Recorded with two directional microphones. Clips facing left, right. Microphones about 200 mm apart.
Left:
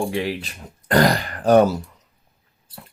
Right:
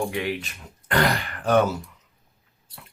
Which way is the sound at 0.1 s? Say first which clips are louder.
Left 3 dB; 30° left (ahead or behind).